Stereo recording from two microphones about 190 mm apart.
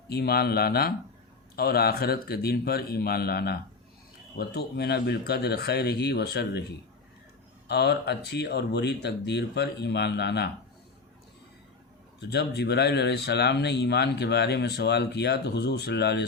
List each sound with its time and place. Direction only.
0.1 s speech: 55° left (ahead or behind)
7.7 s speech: 60° left (ahead or behind)
12.3 s speech: 60° left (ahead or behind)